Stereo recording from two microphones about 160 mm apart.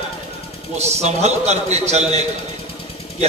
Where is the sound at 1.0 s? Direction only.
45° right (ahead or behind).